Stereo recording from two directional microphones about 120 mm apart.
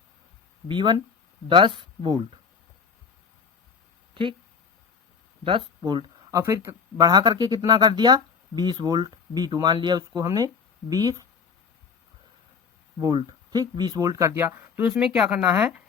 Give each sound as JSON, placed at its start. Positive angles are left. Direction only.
{"t": 0.7, "sound": "speech", "side_deg": -40}
{"t": 4.1, "sound": "speech", "side_deg": -45}
{"t": 5.4, "sound": "speech", "side_deg": -45}
{"t": 6.4, "sound": "speech", "side_deg": -25}
{"t": 13.1, "sound": "speech", "side_deg": -40}
{"t": 14.8, "sound": "speech", "side_deg": -5}